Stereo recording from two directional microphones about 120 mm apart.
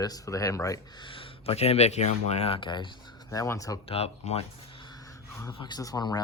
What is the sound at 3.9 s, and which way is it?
Speech, 55° left (ahead or behind).